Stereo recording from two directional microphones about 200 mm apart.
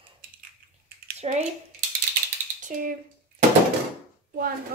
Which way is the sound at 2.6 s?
45° right (ahead or behind).